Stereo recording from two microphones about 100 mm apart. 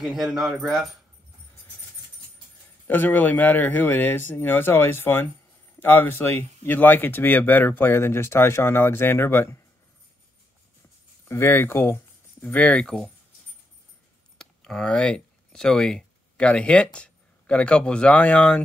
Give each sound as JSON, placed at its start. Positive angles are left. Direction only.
{"t": 0.0, "sound": "speech", "side_deg": -5}
{"t": 2.9, "sound": "speech", "side_deg": 20}
{"t": 11.2, "sound": "speech", "side_deg": 20}
{"t": 14.4, "sound": "speech", "side_deg": 5}